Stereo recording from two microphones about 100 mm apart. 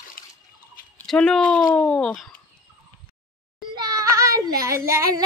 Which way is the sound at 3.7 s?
40° right (ahead or behind).